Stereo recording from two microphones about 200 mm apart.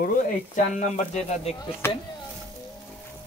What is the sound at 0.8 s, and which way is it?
Speech, 35° left (ahead or behind).